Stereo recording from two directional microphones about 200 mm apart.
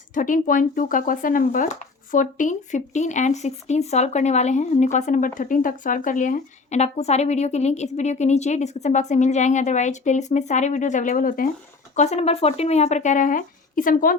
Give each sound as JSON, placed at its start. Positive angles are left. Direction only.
{"t": 0.1, "sound": "speech", "side_deg": 40}